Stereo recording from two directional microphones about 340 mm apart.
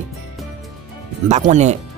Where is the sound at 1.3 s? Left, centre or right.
Centre.